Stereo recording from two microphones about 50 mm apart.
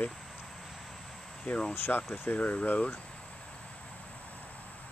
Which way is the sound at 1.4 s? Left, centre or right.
Left.